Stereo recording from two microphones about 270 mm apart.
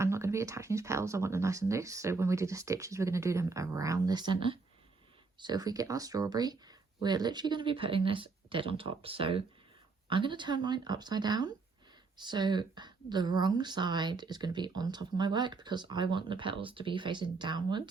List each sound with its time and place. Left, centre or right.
0.0 s speech: centre